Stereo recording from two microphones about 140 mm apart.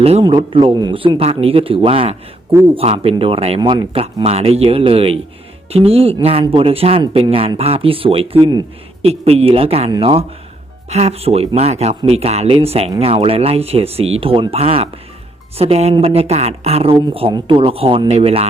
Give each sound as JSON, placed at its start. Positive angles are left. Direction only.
{"t": 0.0, "sound": "speech", "side_deg": -40}
{"t": 3.6, "sound": "speech", "side_deg": -30}
{"t": 4.0, "sound": "speech", "side_deg": -50}
{"t": 8.4, "sound": "speech", "side_deg": -30}
{"t": 9.0, "sound": "speech", "side_deg": -45}